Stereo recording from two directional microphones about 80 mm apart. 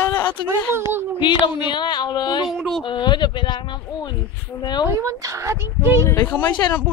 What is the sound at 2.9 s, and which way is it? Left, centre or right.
Speech, left.